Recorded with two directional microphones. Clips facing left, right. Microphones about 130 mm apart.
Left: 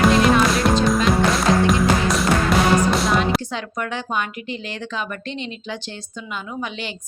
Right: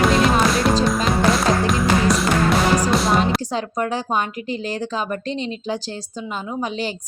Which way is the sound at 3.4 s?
35° right (ahead or behind).